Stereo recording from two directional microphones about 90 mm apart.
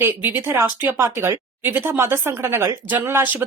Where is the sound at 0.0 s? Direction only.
25° right (ahead or behind).